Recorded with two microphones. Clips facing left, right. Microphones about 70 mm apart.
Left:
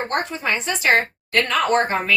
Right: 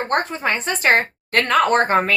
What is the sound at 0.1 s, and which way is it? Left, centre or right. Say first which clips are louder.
A woman's voice: right 5 dB; right.